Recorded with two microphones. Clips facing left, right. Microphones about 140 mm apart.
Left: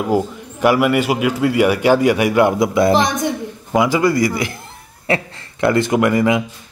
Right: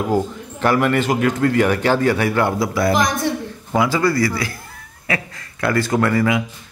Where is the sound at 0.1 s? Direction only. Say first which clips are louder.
Left 2 dB; 10° left (ahead or behind).